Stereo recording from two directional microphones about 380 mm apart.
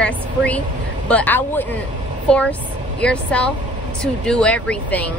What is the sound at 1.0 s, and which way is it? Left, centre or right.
Speech, centre.